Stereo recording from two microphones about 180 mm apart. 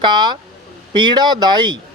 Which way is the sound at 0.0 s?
25° right (ahead or behind).